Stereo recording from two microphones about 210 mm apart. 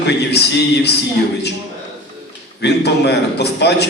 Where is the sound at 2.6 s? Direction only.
55° left (ahead or behind).